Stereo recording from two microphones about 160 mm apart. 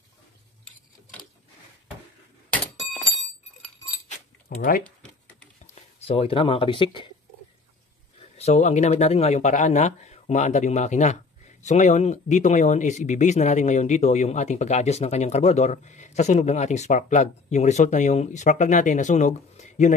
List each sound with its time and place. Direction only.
4.5 s speech: 55° left (ahead or behind)
6.0 s speech: 35° left (ahead or behind)
8.2 s speech: 40° left (ahead or behind)